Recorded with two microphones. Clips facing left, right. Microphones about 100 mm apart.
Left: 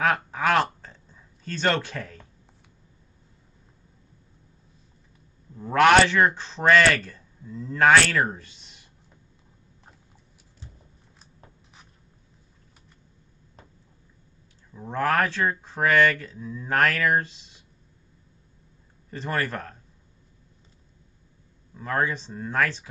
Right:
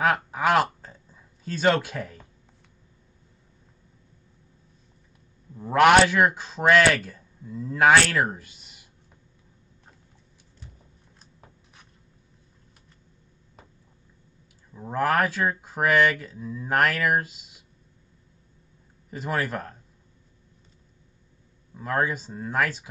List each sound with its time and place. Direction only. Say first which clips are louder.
0.0 s a sound: right 1 dB; 5° right (ahead or behind)
5.6 s speech: right 1 dB; 10° right (ahead or behind)
14.7 s speech: right 1 dB; 10° right (ahead or behind)
19.0 s a man's voice: even; 5° right (ahead or behind)
21.7 s speech: even; 5° right (ahead or behind)